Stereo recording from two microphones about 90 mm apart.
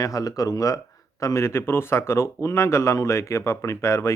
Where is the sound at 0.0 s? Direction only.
40° left (ahead or behind).